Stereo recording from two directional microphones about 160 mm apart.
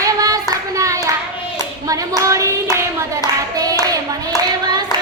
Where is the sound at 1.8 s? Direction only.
20° right (ahead or behind).